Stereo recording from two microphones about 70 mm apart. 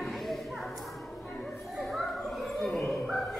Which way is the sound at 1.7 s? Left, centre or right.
Centre.